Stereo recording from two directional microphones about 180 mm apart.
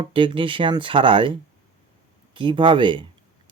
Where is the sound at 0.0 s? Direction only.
30° right (ahead or behind).